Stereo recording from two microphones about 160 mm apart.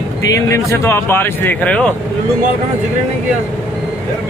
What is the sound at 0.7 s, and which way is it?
Speech, 15° left (ahead or behind).